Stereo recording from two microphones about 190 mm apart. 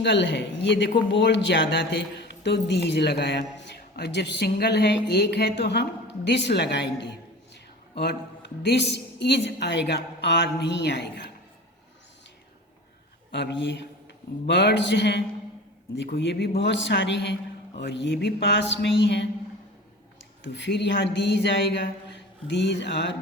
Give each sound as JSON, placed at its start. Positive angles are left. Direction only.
{"t": 0.0, "sound": "a woman's voice", "side_deg": 70}
{"t": 13.3, "sound": "a woman's voice", "side_deg": 70}
{"t": 20.4, "sound": "a woman's voice", "side_deg": 65}
{"t": 21.4, "sound": "a sound", "side_deg": 70}